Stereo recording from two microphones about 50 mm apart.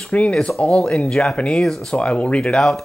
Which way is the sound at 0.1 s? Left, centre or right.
Left.